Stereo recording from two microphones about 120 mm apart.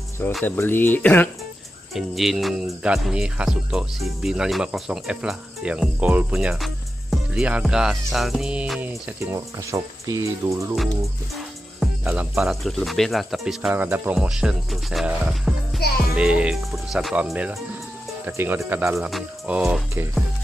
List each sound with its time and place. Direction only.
0.5 s speech: 15° left (ahead or behind)
2.0 s speech: centre (ahead or behind)
9.2 s speech: 25° right (ahead or behind)
12.0 s speech: 10° right (ahead or behind)
13.7 s speech: 15° right (ahead or behind); by 15.0 s centre (ahead or behind)
15.0 s speech: 10° right (ahead or behind)
18.9 s speech: centre (ahead or behind)